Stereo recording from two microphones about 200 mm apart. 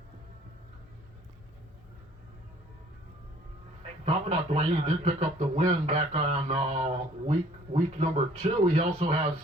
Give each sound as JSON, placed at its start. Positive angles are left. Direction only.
{"t": 4.0, "sound": "a man's voice", "side_deg": -35}